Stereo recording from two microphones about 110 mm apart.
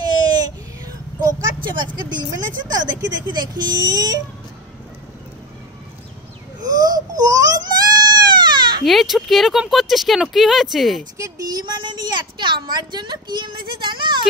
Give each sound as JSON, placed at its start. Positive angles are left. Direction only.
{"t": 0.0, "sound": "a sound", "side_deg": -40}
{"t": 1.8, "sound": "a woman's voice", "side_deg": -40}
{"t": 6.6, "sound": "baby cry", "side_deg": -35}
{"t": 8.8, "sound": "speech", "side_deg": 0}
{"t": 11.1, "sound": "a woman's voice", "side_deg": -30}